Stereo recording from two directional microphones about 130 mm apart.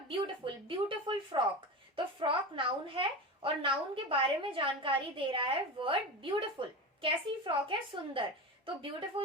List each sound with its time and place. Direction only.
0.1 s a woman's voice: 40° right (ahead or behind)